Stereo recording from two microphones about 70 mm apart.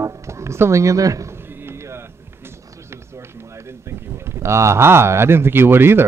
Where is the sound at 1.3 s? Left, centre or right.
Right.